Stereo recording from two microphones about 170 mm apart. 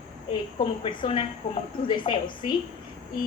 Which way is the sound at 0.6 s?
30° left (ahead or behind).